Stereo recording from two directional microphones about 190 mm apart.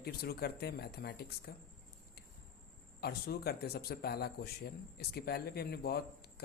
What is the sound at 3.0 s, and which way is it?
Speech, 55° left (ahead or behind).